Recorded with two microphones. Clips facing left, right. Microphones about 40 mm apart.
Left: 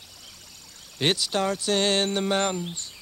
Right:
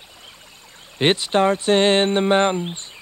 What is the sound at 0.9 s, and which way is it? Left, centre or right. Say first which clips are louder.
Speech: right 7 dB; right.